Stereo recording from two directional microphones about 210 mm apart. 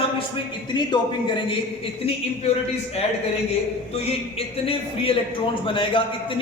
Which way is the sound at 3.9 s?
30° left (ahead or behind).